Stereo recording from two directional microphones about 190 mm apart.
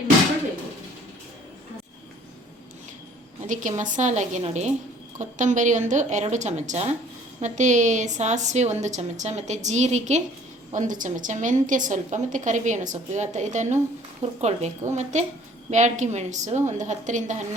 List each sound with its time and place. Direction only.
3.4 s a woman's voice: 40° right (ahead or behind)